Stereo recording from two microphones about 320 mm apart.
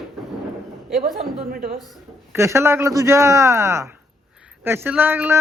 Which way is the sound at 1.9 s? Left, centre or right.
Centre.